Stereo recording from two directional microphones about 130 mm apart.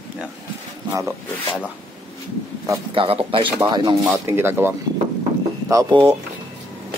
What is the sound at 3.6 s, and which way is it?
Speech, 30° right (ahead or behind).